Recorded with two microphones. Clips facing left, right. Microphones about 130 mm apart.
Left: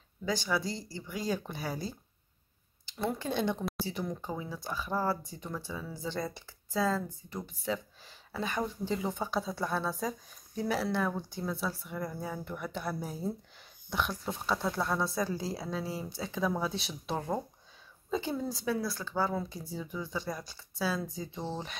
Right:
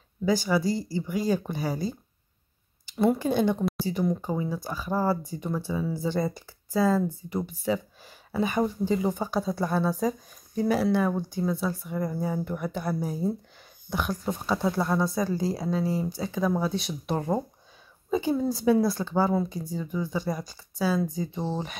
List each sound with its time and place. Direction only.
0.2 s speech: 5° right (ahead or behind)
4.9 s speech: 15° right (ahead or behind)
18.9 s speech: 20° right (ahead or behind)
19.5 s speech: centre (ahead or behind)